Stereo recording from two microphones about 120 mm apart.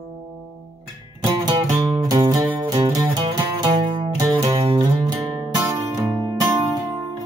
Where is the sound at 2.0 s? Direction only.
35° right (ahead or behind).